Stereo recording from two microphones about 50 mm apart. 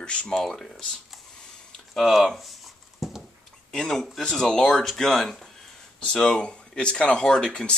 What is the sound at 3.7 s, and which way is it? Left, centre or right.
Speech, centre.